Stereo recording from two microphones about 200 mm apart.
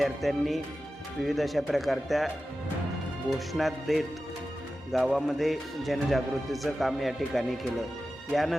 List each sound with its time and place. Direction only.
0.0 s speech: centre (ahead or behind)